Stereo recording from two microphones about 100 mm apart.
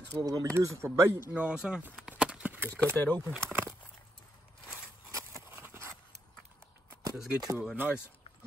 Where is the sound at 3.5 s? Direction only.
20° right (ahead or behind).